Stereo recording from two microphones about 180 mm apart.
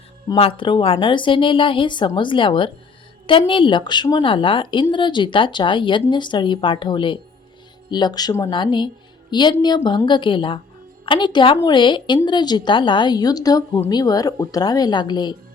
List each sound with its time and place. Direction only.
0.3 s a woman's voice: 30° left (ahead or behind)